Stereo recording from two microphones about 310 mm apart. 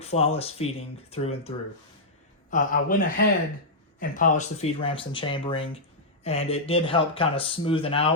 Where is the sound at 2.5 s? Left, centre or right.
Left.